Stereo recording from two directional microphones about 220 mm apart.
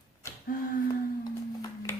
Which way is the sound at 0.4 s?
40° left (ahead or behind).